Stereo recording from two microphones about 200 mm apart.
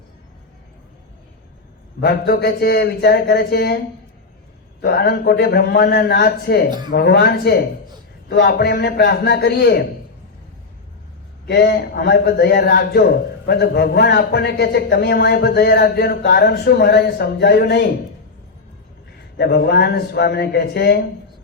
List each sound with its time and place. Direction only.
2.0 s a man's voice: 50° left (ahead or behind)
4.8 s a man's voice: 50° left (ahead or behind)
11.4 s a man's voice: 50° left (ahead or behind)
19.4 s a man's voice: 55° left (ahead or behind)